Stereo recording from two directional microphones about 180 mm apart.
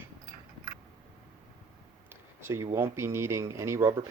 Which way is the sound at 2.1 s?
15° right (ahead or behind).